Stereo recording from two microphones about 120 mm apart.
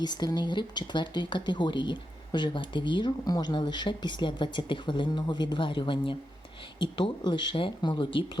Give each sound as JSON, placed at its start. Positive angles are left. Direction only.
{"t": 0.0, "sound": "speech", "side_deg": 35}